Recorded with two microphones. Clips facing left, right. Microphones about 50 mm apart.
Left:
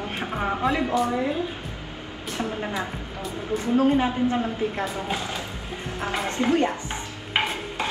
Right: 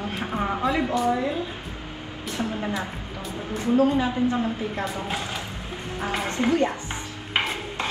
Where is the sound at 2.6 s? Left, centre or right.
Left.